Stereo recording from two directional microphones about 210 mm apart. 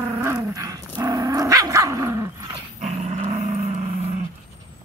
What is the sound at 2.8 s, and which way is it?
Dog, 35° right (ahead or behind).